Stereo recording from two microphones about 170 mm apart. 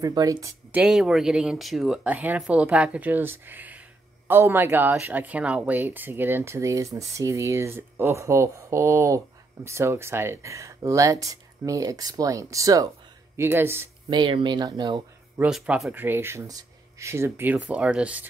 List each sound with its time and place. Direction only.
0.0 s speech: 20° right (ahead or behind)
0.7 s speech: 5° right (ahead or behind)
14.0 s speech: 25° right (ahead or behind)
15.3 s speech: 5° right (ahead or behind)